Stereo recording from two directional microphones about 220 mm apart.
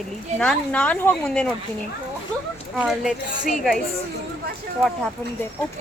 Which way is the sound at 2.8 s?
Centre (ahead or behind).